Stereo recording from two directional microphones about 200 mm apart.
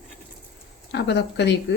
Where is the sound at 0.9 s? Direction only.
60° left (ahead or behind).